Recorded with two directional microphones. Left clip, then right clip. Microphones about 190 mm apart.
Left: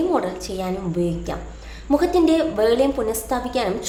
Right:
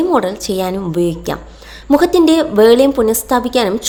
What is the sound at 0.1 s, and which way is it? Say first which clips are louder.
A woman's voice: right 8 dB; 40° right (ahead or behind).